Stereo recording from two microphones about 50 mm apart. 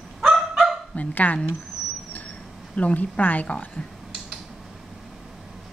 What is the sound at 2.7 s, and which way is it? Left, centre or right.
Speech, left.